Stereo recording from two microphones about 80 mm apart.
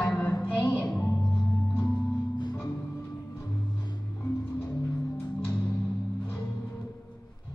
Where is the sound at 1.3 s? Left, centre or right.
Left.